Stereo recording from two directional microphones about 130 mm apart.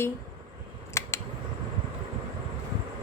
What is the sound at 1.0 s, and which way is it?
Scissors, 20° left (ahead or behind).